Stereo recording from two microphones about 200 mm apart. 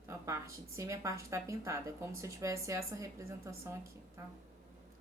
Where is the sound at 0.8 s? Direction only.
15° right (ahead or behind).